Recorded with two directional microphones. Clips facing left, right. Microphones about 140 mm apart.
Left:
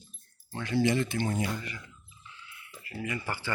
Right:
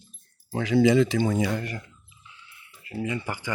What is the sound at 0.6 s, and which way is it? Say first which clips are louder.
Speech: right 8 dB; 90° right.